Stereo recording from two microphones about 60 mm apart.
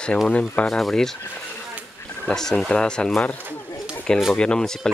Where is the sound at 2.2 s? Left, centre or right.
Centre.